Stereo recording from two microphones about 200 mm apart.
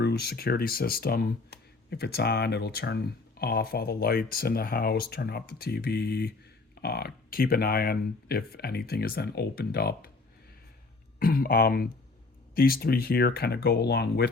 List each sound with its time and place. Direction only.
0.0 s speech: 50° left (ahead or behind)
11.2 s speech: 45° left (ahead or behind)